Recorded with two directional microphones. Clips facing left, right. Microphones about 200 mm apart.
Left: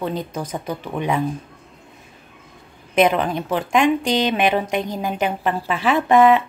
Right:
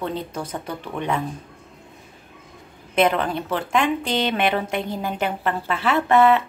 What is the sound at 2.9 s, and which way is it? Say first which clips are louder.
A woman's voice: left 2 dB; 15° left (ahead or behind).